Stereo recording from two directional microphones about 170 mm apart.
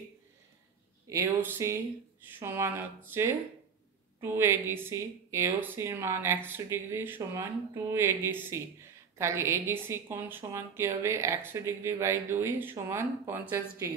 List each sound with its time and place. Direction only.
1.0 s a woman's voice: 15° right (ahead or behind)